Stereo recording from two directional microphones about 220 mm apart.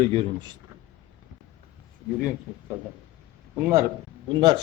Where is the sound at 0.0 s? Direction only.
25° right (ahead or behind).